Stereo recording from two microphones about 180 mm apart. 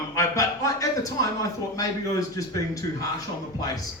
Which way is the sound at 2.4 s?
20° left (ahead or behind).